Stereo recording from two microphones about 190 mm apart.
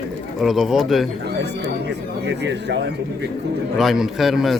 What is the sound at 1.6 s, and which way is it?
Speech, 65° right (ahead or behind).